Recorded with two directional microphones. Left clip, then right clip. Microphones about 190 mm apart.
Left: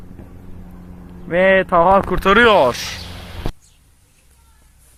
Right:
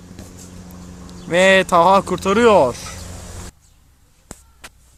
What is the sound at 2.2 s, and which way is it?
Speech, 10° right (ahead or behind).